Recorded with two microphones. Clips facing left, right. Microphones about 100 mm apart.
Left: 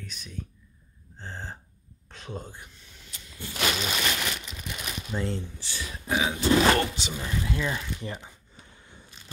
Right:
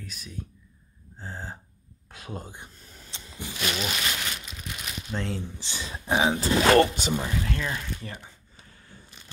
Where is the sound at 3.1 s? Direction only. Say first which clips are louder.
Right 4 dB; 30° right (ahead or behind).